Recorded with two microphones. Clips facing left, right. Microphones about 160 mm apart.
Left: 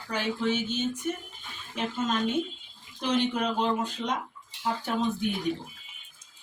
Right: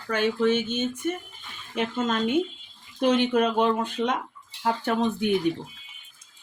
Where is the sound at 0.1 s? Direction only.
55° right (ahead or behind).